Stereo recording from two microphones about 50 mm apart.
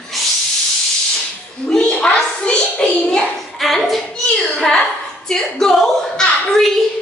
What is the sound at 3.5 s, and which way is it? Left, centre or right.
A child's voice, centre.